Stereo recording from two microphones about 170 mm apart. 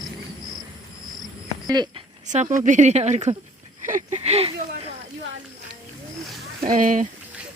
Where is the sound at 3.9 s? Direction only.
45° right (ahead or behind).